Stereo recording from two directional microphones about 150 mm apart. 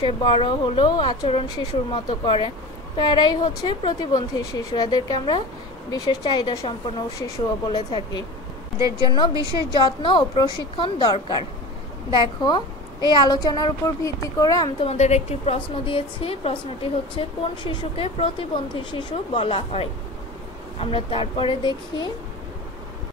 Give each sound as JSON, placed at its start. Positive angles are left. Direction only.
{"t": 0.0, "sound": "a woman's voice", "side_deg": 35}
{"t": 7.7, "sound": "a woman's voice", "side_deg": 30}
{"t": 8.7, "sound": "a woman's voice", "side_deg": -25}
{"t": 9.8, "sound": "a woman's voice", "side_deg": 30}
{"t": 14.8, "sound": "a woman's voice", "side_deg": 45}
{"t": 19.3, "sound": "a woman's voice", "side_deg": 40}